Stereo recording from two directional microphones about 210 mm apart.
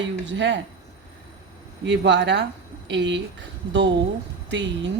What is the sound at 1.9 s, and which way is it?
A man's voice, 55° right (ahead or behind).